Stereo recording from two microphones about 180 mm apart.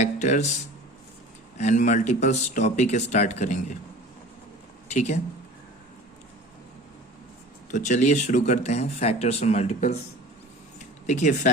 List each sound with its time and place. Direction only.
0.0 s speech: 40° left (ahead or behind)
1.5 s speech: 45° left (ahead or behind)
4.9 s speech: 40° left (ahead or behind)
7.7 s speech: 40° left (ahead or behind)
11.0 s speech: 40° left (ahead or behind)